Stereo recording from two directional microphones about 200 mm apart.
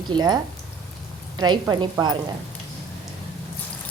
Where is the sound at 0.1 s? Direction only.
20° right (ahead or behind).